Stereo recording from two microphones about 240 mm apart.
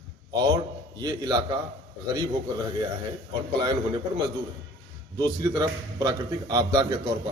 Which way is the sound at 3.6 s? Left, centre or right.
Centre.